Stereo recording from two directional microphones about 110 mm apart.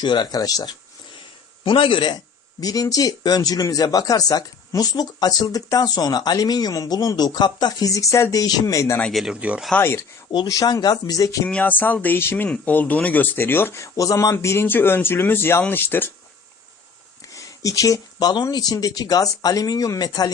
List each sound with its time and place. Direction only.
0.0 s speech: 45° left (ahead or behind)
1.6 s a man's voice: 50° left (ahead or behind)
2.6 s speech: 35° left (ahead or behind)
9.0 s speech: 10° left (ahead or behind)
9.2 s speech: 10° right (ahead or behind)
9.7 s speech: 20° left (ahead or behind)
10.3 s speech: 35° left (ahead or behind)
11.4 s speech: 10° left (ahead or behind)
17.3 s speech: 30° left (ahead or behind)